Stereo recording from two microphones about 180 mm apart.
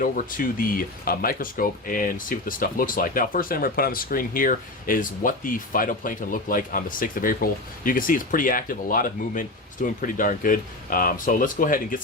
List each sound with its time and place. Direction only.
0.0 s speech: 50° left (ahead or behind)